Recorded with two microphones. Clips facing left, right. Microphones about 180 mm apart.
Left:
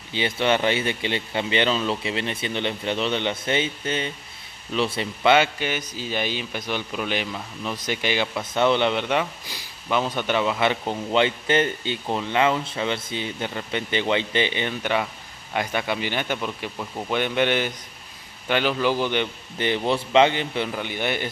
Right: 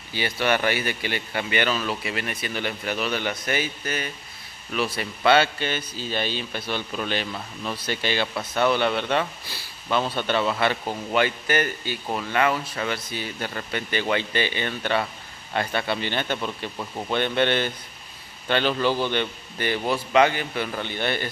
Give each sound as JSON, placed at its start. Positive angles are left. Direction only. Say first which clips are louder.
{"t": 0.1, "sound": "a man's voice", "louder": "left 2 dB", "side_deg": 20}